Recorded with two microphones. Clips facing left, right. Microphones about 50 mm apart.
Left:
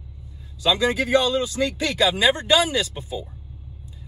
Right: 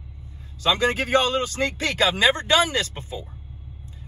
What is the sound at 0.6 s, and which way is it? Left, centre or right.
Speech, right.